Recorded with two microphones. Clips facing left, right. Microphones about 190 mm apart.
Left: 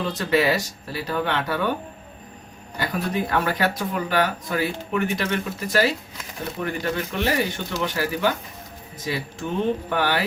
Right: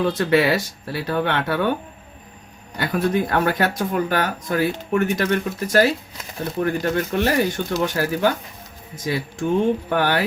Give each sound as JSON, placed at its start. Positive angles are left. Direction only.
{"t": 0.0, "sound": "speech", "side_deg": -55}
{"t": 2.7, "sound": "speech", "side_deg": -50}
{"t": 9.9, "sound": "speech", "side_deg": -50}